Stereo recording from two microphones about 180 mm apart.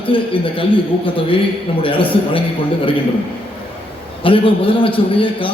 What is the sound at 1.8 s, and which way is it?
Speech, 30° left (ahead or behind).